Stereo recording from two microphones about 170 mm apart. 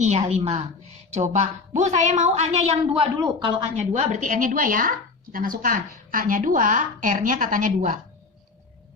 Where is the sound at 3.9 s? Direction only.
45° right (ahead or behind).